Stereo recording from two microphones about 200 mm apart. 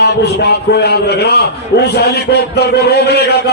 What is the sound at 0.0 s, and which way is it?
A man's voice, 55° left (ahead or behind).